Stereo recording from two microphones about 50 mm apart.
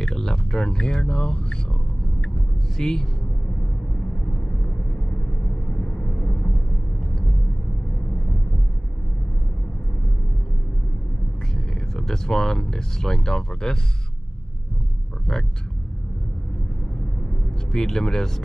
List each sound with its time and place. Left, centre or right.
0.0 s speech: centre
2.8 s speech: centre
5.9 s vehicle: left
11.5 s speech: centre
17.6 s speech: centre